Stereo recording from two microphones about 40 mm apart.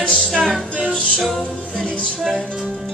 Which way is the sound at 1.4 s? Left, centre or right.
Left.